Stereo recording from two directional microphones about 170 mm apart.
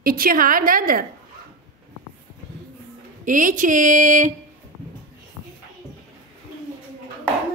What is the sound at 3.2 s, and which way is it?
A woman's voice, 50° right (ahead or behind).